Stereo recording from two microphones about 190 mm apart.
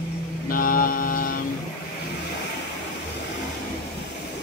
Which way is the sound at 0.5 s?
50° left (ahead or behind).